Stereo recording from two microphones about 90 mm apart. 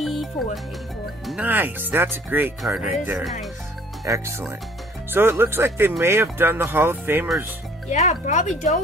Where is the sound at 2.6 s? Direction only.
5° right (ahead or behind).